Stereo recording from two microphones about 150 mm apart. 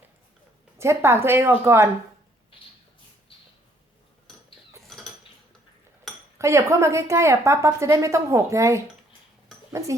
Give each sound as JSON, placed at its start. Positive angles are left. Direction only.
{"t": 0.8, "sound": "speech", "side_deg": -15}
{"t": 2.5, "sound": "a sound", "side_deg": 35}
{"t": 4.9, "sound": "cutlery", "side_deg": 0}
{"t": 6.4, "sound": "a woman's voice", "side_deg": -20}